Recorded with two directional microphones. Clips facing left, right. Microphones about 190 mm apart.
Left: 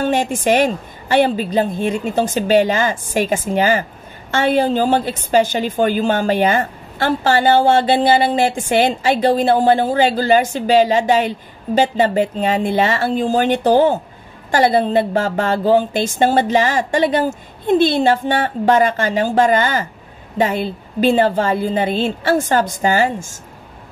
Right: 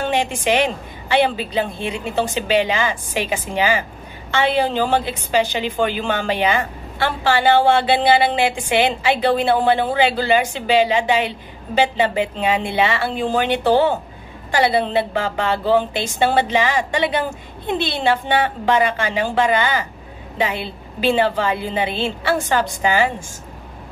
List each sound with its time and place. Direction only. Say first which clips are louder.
0.0 s a woman's voice: left 3 dB; 45° left (ahead or behind)